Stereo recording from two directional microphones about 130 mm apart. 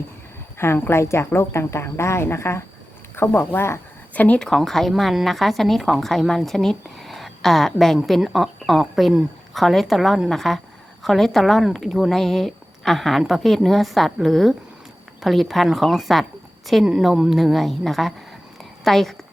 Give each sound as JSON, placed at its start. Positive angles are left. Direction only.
{"t": 0.6, "sound": "speech", "side_deg": 20}